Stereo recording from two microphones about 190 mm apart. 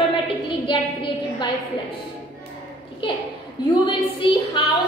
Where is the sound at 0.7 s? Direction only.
25° left (ahead or behind).